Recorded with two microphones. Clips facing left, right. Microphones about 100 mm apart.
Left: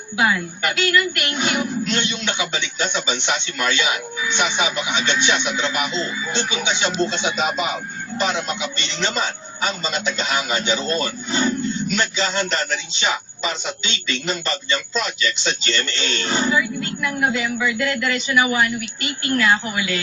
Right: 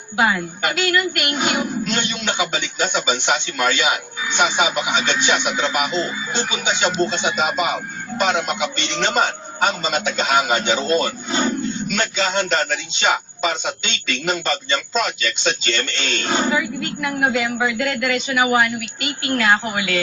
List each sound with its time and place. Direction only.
0.2 s speech: 45° right (ahead or behind)